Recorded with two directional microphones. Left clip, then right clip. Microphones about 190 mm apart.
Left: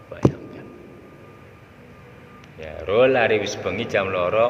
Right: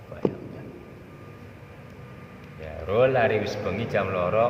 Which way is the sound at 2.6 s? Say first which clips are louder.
Left 4 dB; 50° left (ahead or behind).